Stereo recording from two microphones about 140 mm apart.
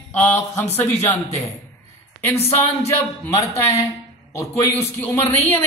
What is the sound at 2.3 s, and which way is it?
Speech, 50° left (ahead or behind).